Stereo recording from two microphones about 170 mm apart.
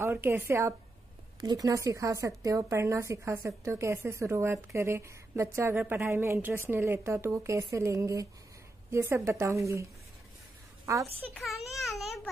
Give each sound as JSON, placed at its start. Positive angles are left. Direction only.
{"t": 0.0, "sound": "a woman's voice", "side_deg": -15}
{"t": 11.3, "sound": "speech", "side_deg": 0}